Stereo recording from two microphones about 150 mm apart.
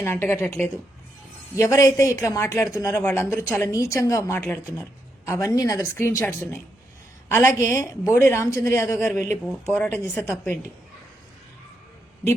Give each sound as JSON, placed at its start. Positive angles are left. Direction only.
{"t": 0.0, "sound": "a woman's voice", "side_deg": 15}
{"t": 4.4, "sound": "a woman's voice", "side_deg": 10}
{"t": 4.6, "sound": "a woman's voice", "side_deg": 20}